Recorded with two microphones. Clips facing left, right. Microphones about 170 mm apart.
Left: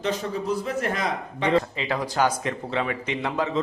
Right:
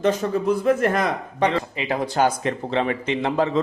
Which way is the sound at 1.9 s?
25° right (ahead or behind).